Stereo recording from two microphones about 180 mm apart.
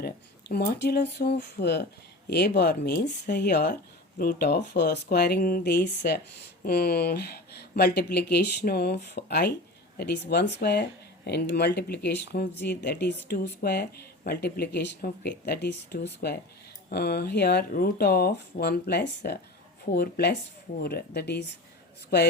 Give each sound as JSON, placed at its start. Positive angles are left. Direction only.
{"t": 0.0, "sound": "speech", "side_deg": 60}